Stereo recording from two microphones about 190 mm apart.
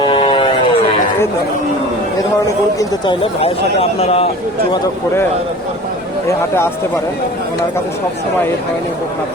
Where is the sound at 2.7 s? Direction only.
25° left (ahead or behind).